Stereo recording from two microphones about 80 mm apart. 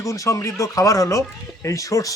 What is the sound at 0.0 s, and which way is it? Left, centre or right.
Speech, left.